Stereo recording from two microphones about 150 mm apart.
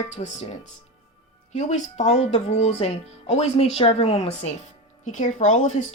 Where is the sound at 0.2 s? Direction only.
45° left (ahead or behind).